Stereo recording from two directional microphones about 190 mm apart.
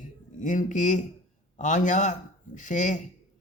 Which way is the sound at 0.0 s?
40° left (ahead or behind).